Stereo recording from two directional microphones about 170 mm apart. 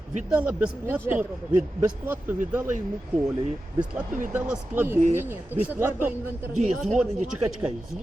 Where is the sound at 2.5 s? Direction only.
10° right (ahead or behind).